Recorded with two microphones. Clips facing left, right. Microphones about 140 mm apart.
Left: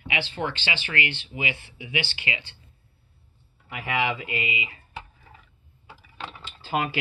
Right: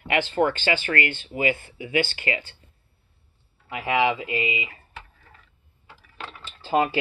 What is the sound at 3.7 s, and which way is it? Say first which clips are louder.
Speech: right 5 dB; 25° right (ahead or behind).